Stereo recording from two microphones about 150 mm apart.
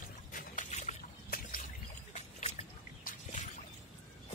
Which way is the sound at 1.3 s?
70° left (ahead or behind).